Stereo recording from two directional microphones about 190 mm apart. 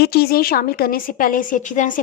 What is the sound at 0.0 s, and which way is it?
A woman's voice, 55° left (ahead or behind).